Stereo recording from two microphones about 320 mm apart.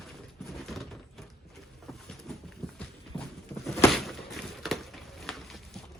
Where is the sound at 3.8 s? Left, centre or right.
Centre.